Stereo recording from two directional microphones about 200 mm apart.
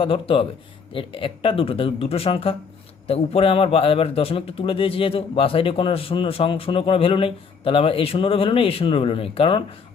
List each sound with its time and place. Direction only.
0.0 s a man's voice: 25° left (ahead or behind)